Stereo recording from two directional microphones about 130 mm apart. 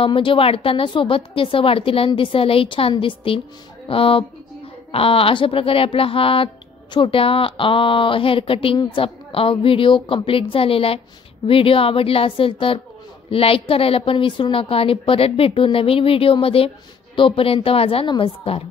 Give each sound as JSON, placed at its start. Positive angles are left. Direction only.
{"t": 0.0, "sound": "speech", "side_deg": 40}